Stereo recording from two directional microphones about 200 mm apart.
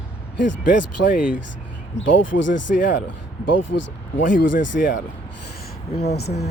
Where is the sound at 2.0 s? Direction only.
70° left (ahead or behind).